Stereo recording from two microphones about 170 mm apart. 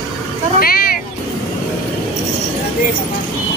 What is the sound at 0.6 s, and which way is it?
Vehicle, 60° left (ahead or behind).